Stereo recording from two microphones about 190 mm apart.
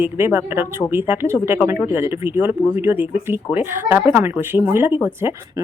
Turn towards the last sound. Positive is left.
turn(degrees=-10)  # may be behind; listen again after turning